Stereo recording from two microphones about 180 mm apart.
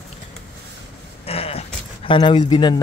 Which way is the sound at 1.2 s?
35° left (ahead or behind).